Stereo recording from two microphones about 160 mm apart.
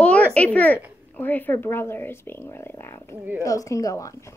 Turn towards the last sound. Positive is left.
turn(degrees=20)  # may be behind; listen again after turning